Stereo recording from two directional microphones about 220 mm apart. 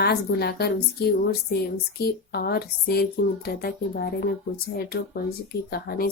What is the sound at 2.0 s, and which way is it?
Speech, 45° left (ahead or behind).